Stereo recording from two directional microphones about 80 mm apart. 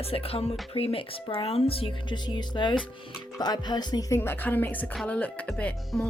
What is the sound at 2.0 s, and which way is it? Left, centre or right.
Speech, left.